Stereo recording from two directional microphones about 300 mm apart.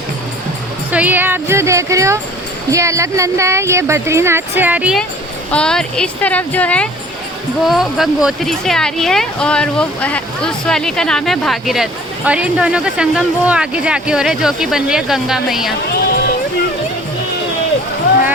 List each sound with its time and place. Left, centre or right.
0.9 s speech: centre